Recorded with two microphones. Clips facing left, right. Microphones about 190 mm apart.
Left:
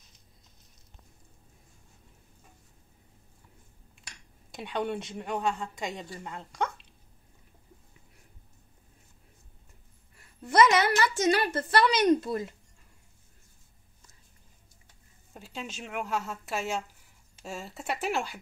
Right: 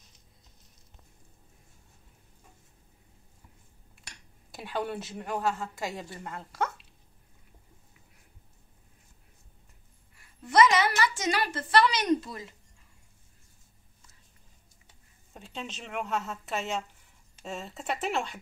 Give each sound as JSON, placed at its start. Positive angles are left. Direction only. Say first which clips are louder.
{"t": 4.5, "sound": "a woman's voice", "louder": "left 2 dB", "side_deg": -5}
{"t": 10.6, "sound": "a sound", "louder": "left 1 dB", "side_deg": 60}
{"t": 15.3, "sound": "a woman's voice", "louder": "even", "side_deg": 5}